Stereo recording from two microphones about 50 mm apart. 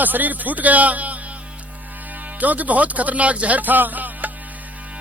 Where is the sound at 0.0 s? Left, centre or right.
Right.